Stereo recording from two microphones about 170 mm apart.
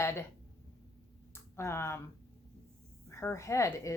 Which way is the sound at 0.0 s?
15° left (ahead or behind).